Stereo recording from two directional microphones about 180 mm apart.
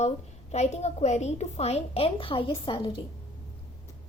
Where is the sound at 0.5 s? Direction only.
40° left (ahead or behind).